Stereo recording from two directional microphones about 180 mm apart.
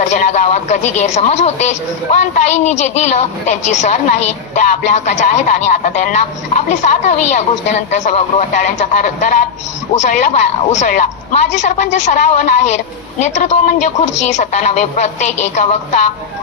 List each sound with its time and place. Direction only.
0.0 s speech: 40° left (ahead or behind)